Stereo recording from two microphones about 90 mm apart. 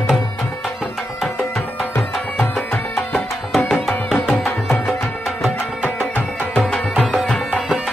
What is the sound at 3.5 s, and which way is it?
Music, centre (ahead or behind).